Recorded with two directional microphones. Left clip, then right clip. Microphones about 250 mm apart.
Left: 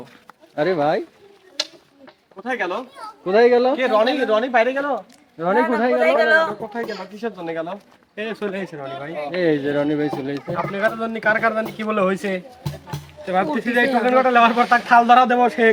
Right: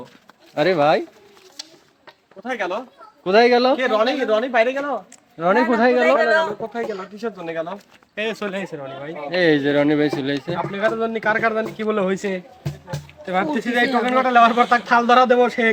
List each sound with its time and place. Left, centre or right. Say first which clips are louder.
0.5 s a man's voice: right 3 dB; right
2.4 s speech: left 1 dB; centre
3.2 s speech: even; right
3.8 s speech: left 1 dB; centre
5.4 s a man's voice: right 2 dB; right
6.1 s speech: left 1 dB; centre
6.7 s speech: right 1 dB; centre
8.1 s a man's voice: right 2 dB; right
8.8 s speech: left 1 dB; centre
9.3 s speech: right 3 dB; right
10.3 s speech: even; centre
13.2 s speech: left 1 dB; centre